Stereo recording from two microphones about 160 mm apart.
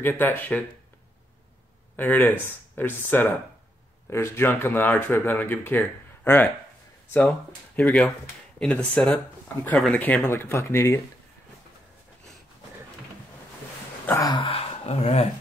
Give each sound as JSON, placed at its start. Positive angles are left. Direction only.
{"t": 0.0, "sound": "speech", "side_deg": 15}
{"t": 2.0, "sound": "speech", "side_deg": 10}
{"t": 14.0, "sound": "a sound", "side_deg": 15}
{"t": 14.3, "sound": "speech", "side_deg": 35}